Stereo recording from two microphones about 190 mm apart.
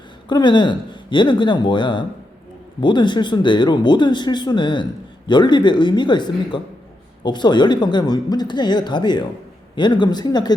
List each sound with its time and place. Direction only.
0.3 s speech: 25° left (ahead or behind)